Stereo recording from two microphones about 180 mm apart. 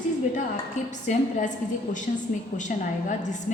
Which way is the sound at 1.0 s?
45° left (ahead or behind).